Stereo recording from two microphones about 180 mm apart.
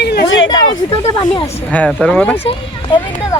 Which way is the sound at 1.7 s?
5° left (ahead or behind).